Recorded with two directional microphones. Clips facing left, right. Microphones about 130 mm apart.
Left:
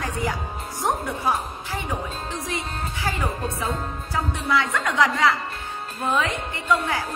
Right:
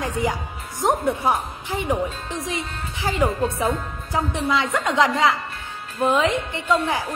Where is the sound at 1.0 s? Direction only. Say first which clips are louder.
Right 4 dB; 25° right (ahead or behind).